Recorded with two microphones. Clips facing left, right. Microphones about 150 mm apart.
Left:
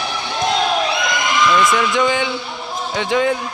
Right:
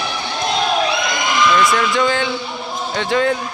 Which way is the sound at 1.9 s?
15° left (ahead or behind).